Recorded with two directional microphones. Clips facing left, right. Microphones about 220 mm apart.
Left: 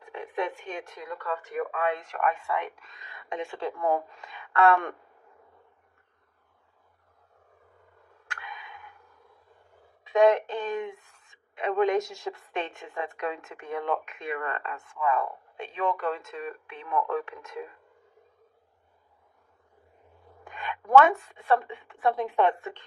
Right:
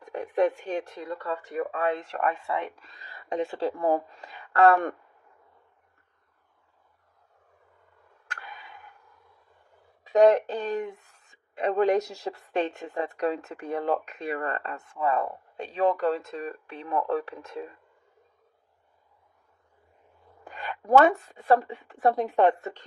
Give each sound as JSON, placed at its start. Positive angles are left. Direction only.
{"t": 0.1, "sound": "speech", "side_deg": -40}
{"t": 8.3, "sound": "a sound", "side_deg": -40}
{"t": 10.0, "sound": "speech", "side_deg": -40}
{"t": 20.4, "sound": "speech", "side_deg": -35}